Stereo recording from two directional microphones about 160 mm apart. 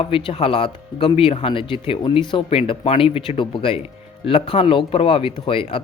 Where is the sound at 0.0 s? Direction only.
35° left (ahead or behind).